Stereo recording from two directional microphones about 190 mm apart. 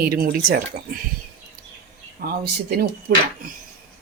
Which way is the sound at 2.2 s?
55° right (ahead or behind).